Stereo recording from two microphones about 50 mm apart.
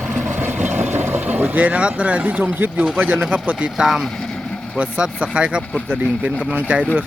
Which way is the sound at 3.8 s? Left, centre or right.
Centre.